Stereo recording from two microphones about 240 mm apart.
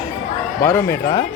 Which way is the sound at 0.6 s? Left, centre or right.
Centre.